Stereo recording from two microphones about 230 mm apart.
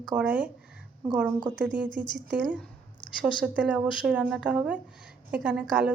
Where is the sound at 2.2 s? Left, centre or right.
Centre.